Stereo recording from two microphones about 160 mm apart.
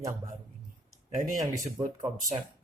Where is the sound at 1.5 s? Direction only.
20° right (ahead or behind).